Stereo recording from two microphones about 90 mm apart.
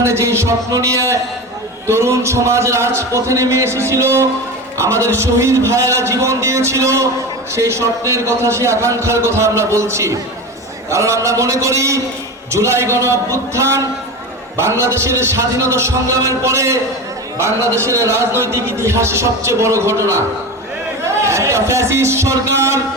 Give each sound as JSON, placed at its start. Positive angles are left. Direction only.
{"t": 0.0, "sound": "a man's voice", "side_deg": -30}